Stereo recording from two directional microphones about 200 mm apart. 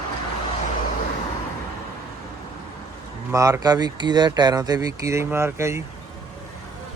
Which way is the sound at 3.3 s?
15° right (ahead or behind).